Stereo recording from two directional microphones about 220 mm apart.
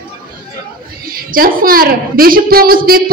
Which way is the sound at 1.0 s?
40° right (ahead or behind).